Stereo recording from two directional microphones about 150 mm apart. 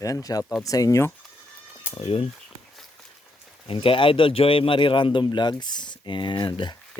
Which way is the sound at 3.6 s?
35° left (ahead or behind).